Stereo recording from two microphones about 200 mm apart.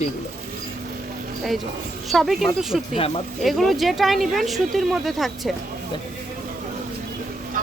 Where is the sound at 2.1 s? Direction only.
Centre (ahead or behind).